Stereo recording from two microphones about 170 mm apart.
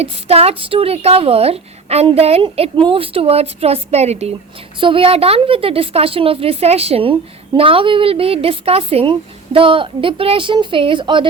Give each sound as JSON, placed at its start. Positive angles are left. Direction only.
{"t": 0.0, "sound": "speech", "side_deg": -35}